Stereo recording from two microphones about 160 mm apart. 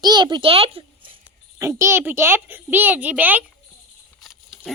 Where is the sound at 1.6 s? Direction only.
15° right (ahead or behind).